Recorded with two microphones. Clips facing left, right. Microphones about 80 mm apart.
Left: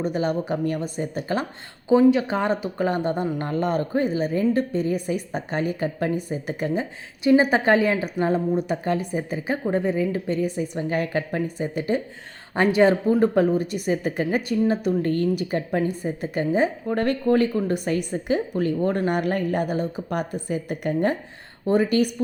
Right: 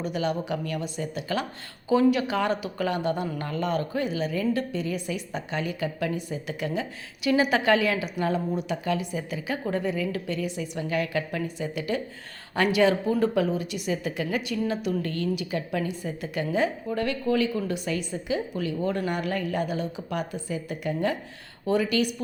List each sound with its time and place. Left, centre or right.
0.0 s a woman's voice: left
1.9 s a woman's voice: left
3.6 s a woman's voice: left
16.9 s a woman's voice: left